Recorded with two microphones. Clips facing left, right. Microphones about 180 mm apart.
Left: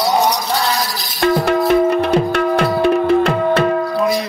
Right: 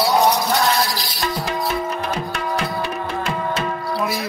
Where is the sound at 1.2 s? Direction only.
55° left (ahead or behind).